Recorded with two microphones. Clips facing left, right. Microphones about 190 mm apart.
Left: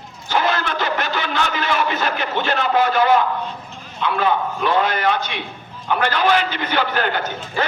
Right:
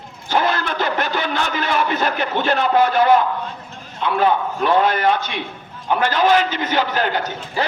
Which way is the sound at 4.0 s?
50° right (ahead or behind).